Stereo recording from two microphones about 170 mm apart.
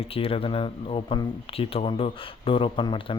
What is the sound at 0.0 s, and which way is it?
Speech, 35° left (ahead or behind).